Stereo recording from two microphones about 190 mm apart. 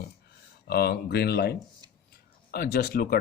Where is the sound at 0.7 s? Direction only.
55° left (ahead or behind).